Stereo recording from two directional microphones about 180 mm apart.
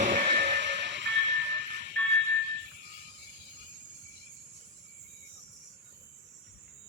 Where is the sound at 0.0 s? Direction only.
45° right (ahead or behind).